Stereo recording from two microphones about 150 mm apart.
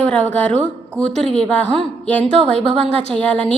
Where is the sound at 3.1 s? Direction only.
5° left (ahead or behind).